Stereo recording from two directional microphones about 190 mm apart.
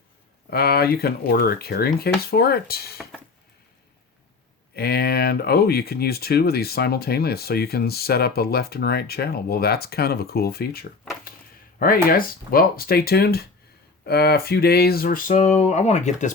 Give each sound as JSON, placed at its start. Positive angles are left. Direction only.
{"t": 0.5, "sound": "speech", "side_deg": 55}
{"t": 4.7, "sound": "speech", "side_deg": 55}
{"t": 11.8, "sound": "a sound", "side_deg": 50}